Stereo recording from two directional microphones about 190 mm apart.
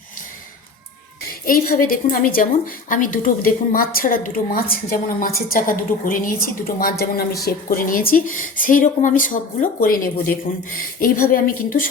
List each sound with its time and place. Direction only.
1.3 s a woman's voice: 50° left (ahead or behind)